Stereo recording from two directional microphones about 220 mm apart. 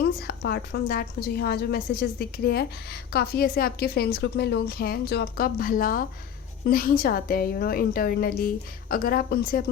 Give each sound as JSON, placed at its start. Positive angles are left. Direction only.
{"t": 0.0, "sound": "a woman's voice", "side_deg": 45}